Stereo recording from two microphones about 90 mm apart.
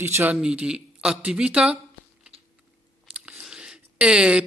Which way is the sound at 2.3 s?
90° right.